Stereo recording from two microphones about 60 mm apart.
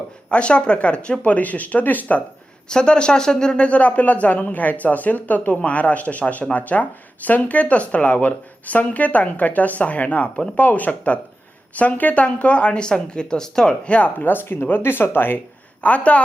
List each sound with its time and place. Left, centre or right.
0.3 s speech: centre
2.6 s speech: centre
3.7 s speech: left
14.2 s speech: left
15.8 s speech: left